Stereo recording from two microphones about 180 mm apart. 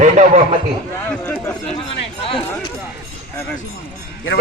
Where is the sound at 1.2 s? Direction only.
15° left (ahead or behind).